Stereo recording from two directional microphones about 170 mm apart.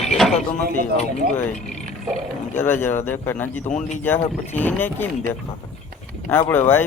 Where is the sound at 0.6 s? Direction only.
50° right (ahead or behind).